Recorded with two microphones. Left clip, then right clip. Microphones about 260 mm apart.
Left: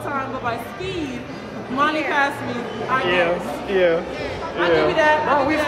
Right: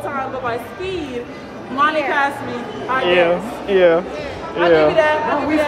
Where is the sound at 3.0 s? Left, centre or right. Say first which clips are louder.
Right 6 dB; right.